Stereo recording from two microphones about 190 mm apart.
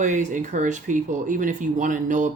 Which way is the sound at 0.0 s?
40° right (ahead or behind).